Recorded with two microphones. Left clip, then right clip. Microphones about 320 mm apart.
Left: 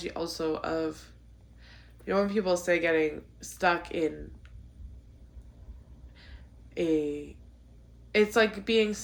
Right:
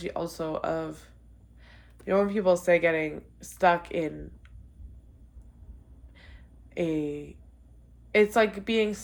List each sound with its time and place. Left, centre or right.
0.0 s speech: right
6.1 s a sound: right
8.1 s speech: right